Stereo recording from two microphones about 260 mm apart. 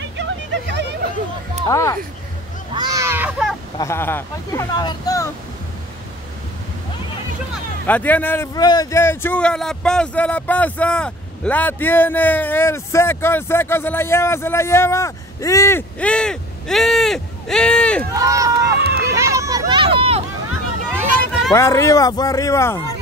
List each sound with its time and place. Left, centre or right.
0.2 s a sound: right
1.7 s speech: centre
2.7 s speech: centre
3.7 s speech: centre
7.8 s speech: centre
18.1 s speech: centre
18.9 s a sound: centre
21.5 s speech: centre